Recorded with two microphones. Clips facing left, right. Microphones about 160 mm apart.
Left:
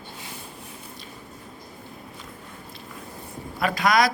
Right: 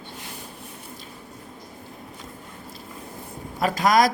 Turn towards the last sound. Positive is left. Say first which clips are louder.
# right 2 dB
turn(degrees=-40)  # may be behind; listen again after turning